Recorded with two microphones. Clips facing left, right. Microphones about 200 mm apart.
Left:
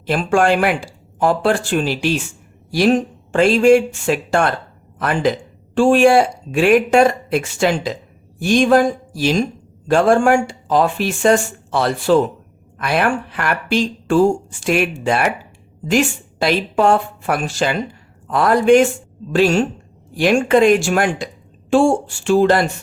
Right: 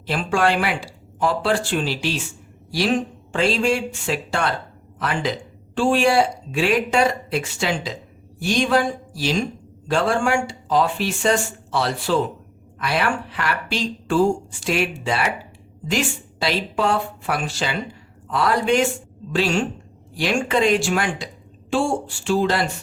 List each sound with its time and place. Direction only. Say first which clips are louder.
0.0 s speech: left 5 dB; 50° left (ahead or behind)
3.3 s speech: left 9 dB; 50° left (ahead or behind)